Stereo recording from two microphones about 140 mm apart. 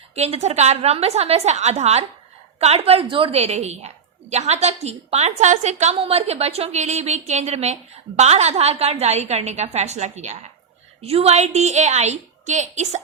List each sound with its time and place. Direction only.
0.1 s a woman's voice: 50° right (ahead or behind)